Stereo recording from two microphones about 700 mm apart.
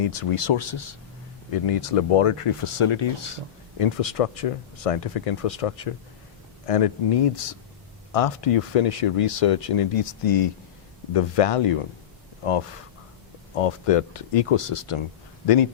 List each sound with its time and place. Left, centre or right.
0.0 s speech: left
13.6 s speech: left